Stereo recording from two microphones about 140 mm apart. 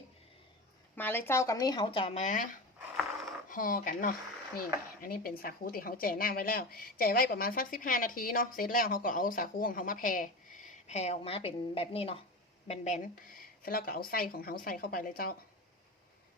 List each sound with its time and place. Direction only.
0.9 s speech: 15° left (ahead or behind); by 2.2 s 40° left (ahead or behind)
3.5 s speech: 75° left (ahead or behind)
4.5 s a woman's voice: 90° left; by 13.0 s 50° left (ahead or behind)
13.6 s a woman's voice: 90° left